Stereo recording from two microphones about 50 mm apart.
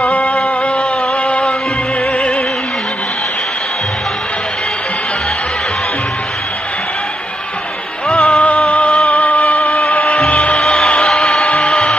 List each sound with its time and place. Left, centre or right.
0.1 s a sound: left
1.2 s music: centre
8.1 s music: centre
8.6 s music: left
10.0 s music: centre
10.3 s music: left
10.6 s music: centre
11.4 s a sound: left